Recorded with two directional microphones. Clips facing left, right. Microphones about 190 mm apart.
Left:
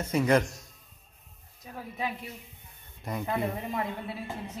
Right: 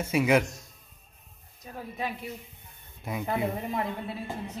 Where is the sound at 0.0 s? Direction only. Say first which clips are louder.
Right 1 dB; 10° right (ahead or behind).